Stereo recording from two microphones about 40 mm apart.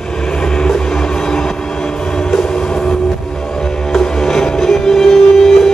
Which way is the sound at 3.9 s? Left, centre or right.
Centre.